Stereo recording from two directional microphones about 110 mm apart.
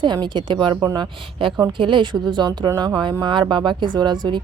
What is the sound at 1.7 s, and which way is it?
A woman's voice, 45° right (ahead or behind).